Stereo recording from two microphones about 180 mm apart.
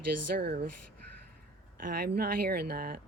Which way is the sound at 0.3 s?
60° right (ahead or behind).